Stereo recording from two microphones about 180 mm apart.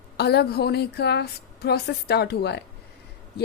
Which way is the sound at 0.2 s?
65° left (ahead or behind).